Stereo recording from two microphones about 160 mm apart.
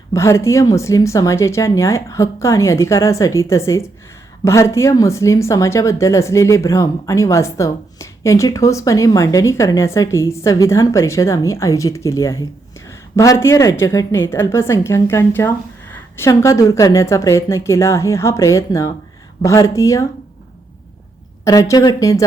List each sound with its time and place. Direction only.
0.1 s a woman's voice: 20° left (ahead or behind)
21.4 s speech: 20° left (ahead or behind)